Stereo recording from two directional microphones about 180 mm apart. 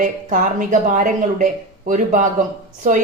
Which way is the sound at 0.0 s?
45° right (ahead or behind).